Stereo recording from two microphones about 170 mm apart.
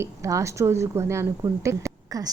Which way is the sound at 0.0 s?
20° right (ahead or behind).